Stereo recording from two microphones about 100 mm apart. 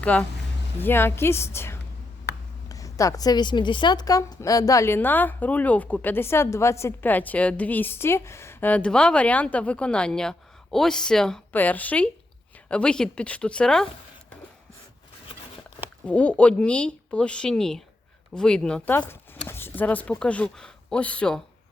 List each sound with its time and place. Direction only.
0.0 s a woman's voice: 15° left (ahead or behind); by 4.9 s 30° left (ahead or behind)
4.9 s a woman's voice: 20° left (ahead or behind)
11.5 s a woman's voice: 15° left (ahead or behind)
16.0 s a woman's voice: 10° left (ahead or behind)
18.9 s speech: 20° left (ahead or behind)